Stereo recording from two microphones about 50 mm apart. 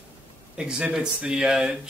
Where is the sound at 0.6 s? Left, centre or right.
Centre.